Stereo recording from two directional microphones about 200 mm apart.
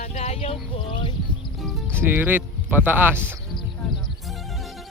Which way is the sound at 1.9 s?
10° right (ahead or behind).